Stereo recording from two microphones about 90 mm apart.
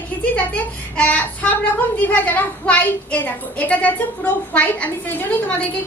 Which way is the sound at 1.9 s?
15° left (ahead or behind).